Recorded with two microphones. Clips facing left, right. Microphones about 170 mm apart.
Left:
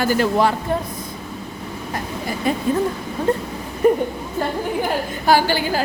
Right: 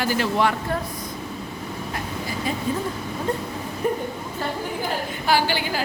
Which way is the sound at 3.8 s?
75° left (ahead or behind).